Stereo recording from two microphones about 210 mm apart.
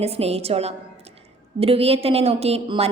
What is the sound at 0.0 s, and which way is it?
A woman's voice, 30° right (ahead or behind).